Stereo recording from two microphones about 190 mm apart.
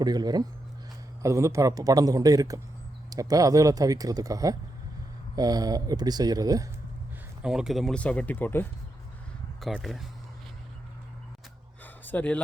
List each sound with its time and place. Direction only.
0.0 s speech: 20° right (ahead or behind)
7.4 s speech: 5° right (ahead or behind)
9.6 s speech: centre (ahead or behind)
12.0 s speech: 10° left (ahead or behind)